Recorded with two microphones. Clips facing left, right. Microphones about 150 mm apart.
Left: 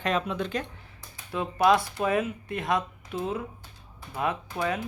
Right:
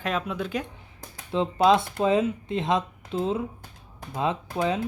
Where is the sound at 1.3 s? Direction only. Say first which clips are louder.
Right 2 dB; 25° right (ahead or behind).